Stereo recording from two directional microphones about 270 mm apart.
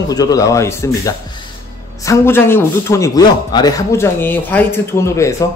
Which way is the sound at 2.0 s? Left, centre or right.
Centre.